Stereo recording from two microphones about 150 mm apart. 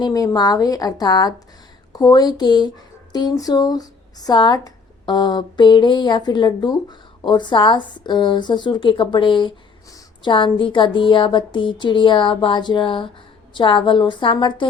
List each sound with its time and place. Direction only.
0.0 s speech: 25° left (ahead or behind)